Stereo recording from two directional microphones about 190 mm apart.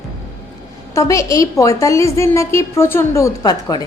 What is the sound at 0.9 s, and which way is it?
A woman's voice, 15° left (ahead or behind).